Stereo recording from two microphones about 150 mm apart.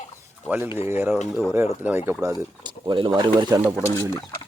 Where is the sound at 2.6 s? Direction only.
30° right (ahead or behind).